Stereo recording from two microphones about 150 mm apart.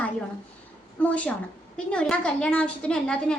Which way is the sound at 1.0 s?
10° left (ahead or behind).